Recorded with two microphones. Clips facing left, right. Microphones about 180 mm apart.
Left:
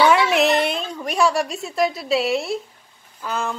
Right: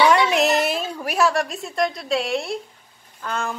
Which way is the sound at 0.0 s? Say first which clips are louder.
Left 1 dB; centre (ahead or behind).